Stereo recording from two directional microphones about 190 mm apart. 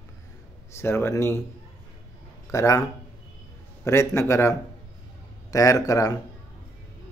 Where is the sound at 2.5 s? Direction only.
15° left (ahead or behind).